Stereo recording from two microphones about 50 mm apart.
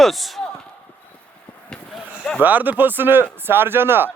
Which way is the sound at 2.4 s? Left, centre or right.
Right.